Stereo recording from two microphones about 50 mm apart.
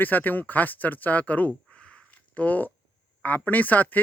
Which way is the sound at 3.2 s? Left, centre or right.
Left.